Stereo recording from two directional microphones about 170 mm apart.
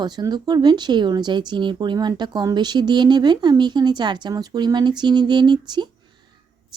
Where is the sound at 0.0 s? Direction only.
25° right (ahead or behind).